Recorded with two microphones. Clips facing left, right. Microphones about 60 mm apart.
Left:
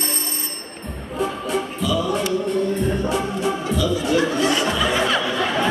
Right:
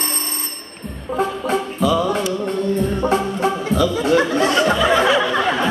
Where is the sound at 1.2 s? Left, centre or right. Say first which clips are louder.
Right 3 dB; right.